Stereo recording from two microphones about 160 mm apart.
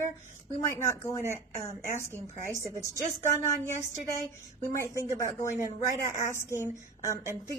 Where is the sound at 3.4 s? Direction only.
15° left (ahead or behind).